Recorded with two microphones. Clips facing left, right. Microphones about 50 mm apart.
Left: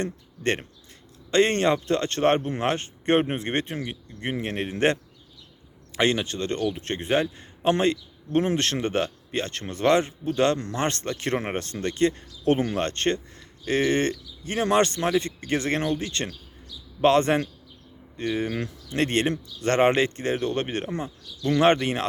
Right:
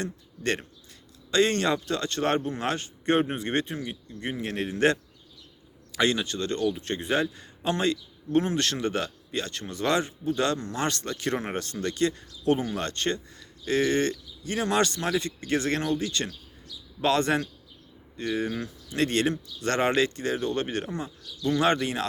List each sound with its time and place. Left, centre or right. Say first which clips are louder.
0.0 s speech: left 3 dB; left
6.0 s speech: left 2 dB; left